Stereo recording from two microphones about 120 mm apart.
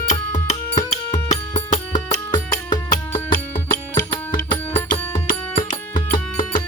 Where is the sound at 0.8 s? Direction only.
30° left (ahead or behind).